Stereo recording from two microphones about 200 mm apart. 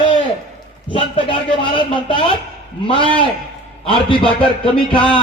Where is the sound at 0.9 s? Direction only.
25° left (ahead or behind).